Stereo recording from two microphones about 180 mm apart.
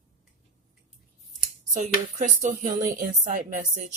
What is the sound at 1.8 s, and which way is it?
Speech, 45° right (ahead or behind).